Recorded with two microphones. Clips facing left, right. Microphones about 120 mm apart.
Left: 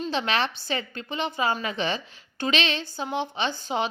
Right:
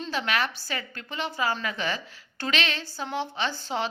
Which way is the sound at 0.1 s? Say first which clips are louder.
Even; 25° left (ahead or behind).